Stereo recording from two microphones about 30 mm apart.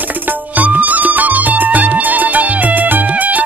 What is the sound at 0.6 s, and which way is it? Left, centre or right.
Music, right.